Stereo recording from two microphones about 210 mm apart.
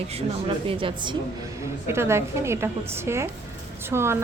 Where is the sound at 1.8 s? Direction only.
10° right (ahead or behind).